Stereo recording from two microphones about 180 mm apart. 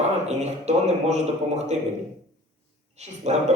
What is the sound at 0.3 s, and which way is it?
A man's voice, 40° right (ahead or behind).